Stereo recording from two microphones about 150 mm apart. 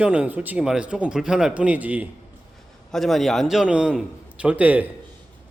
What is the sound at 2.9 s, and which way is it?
Speech, centre (ahead or behind).